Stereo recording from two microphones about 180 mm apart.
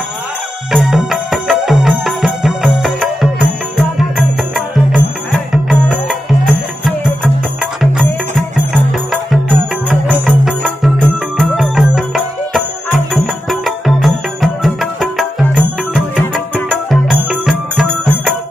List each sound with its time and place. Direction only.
0.7 s music: centre (ahead or behind)